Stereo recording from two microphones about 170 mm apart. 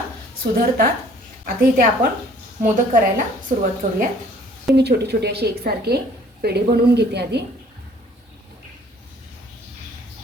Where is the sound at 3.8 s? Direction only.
45° right (ahead or behind).